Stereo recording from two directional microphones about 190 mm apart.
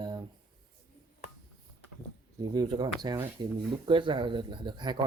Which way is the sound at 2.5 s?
20° right (ahead or behind).